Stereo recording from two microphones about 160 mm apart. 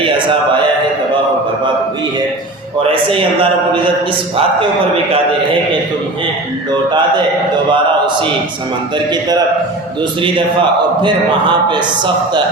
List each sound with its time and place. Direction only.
2.9 s a man's voice: 35° right (ahead or behind)
7.7 s a sound: 30° right (ahead or behind)
10.0 s a man's voice: 30° right (ahead or behind)